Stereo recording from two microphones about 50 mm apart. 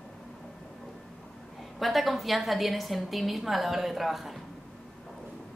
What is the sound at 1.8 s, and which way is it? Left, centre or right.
A woman's voice, centre.